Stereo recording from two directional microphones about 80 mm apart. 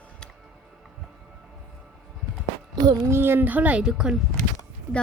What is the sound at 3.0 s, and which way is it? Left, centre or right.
Speech, right.